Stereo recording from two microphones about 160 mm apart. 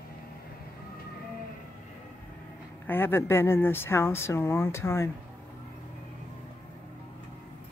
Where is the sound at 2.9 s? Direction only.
15° left (ahead or behind).